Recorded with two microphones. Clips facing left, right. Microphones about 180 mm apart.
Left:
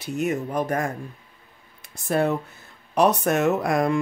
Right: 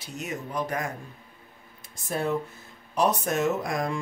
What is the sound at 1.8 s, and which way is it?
Speech, 65° left (ahead or behind).